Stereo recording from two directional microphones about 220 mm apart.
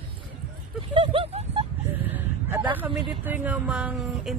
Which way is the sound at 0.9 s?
25° right (ahead or behind).